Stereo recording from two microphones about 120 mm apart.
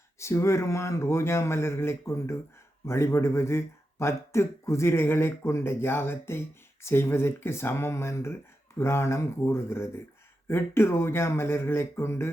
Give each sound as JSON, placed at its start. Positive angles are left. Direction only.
{"t": 0.2, "sound": "speech", "side_deg": 25}